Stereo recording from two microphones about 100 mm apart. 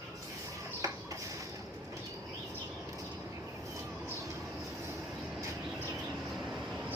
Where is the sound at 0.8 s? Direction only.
35° right (ahead or behind).